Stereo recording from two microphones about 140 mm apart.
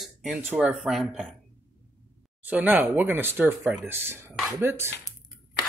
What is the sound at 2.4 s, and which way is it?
Speech, 10° right (ahead or behind).